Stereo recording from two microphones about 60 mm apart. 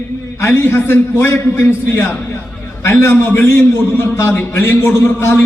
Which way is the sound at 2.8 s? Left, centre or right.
Left.